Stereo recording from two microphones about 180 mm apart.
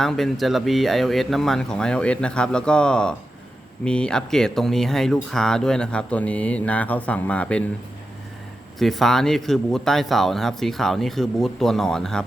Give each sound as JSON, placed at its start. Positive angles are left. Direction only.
{"t": 0.0, "sound": "speech", "side_deg": 0}
{"t": 8.8, "sound": "speech", "side_deg": 0}